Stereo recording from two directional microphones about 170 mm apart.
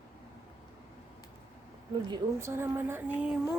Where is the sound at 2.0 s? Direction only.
25° right (ahead or behind).